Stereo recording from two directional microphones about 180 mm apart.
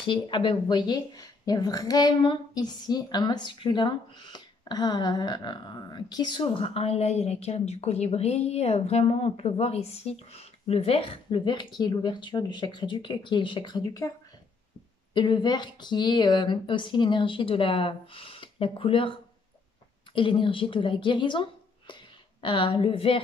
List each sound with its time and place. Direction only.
0.0 s speech: 25° left (ahead or behind)
15.1 s speech: 25° left (ahead or behind)
20.2 s speech: 30° left (ahead or behind)